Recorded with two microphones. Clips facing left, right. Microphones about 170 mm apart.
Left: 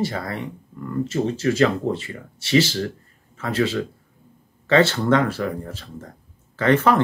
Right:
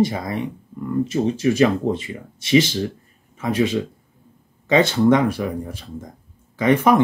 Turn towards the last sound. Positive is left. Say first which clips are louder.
# right 2 dB
turn(degrees=-15)  # may be behind; listen again after turning